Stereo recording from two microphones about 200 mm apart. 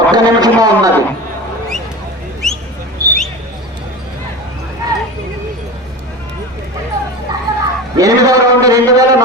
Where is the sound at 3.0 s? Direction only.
15° right (ahead or behind).